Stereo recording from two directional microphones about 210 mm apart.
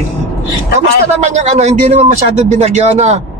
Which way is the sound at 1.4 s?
30° right (ahead or behind).